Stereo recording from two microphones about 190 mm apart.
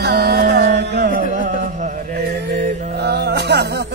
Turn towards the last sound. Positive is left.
turn(degrees=-60)  # may be behind; listen again after turning